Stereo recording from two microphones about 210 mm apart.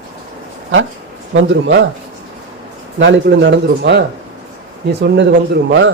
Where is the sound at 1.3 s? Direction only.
60° right (ahead or behind).